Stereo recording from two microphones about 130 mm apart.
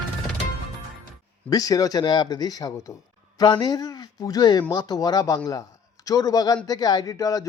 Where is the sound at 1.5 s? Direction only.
30° left (ahead or behind).